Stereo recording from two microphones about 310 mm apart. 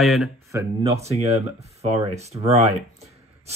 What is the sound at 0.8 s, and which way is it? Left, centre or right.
Speech, centre.